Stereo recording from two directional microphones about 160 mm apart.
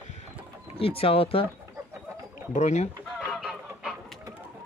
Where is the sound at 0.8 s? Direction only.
35° left (ahead or behind).